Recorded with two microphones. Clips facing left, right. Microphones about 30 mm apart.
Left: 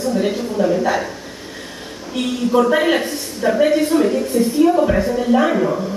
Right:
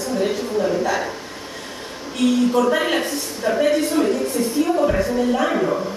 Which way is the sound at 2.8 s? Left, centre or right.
Centre.